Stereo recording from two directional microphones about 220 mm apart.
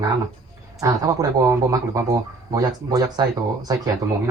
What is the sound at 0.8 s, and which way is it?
Speech, 15° right (ahead or behind).